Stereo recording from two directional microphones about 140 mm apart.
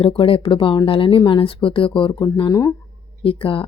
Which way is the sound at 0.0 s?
40° left (ahead or behind).